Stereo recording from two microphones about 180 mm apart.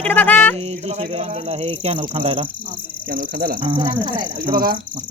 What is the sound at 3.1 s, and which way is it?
Speech, 55° right (ahead or behind).